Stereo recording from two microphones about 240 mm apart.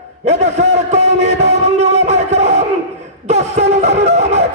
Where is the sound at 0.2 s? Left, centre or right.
Right.